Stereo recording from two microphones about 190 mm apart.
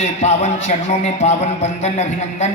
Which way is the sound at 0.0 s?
35° left (ahead or behind).